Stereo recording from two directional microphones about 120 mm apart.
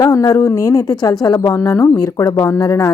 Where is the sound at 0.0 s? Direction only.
30° left (ahead or behind).